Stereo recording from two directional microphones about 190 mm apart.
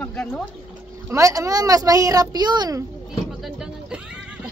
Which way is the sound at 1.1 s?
15° right (ahead or behind).